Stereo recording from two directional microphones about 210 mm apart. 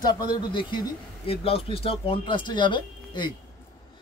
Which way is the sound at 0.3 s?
20° left (ahead or behind).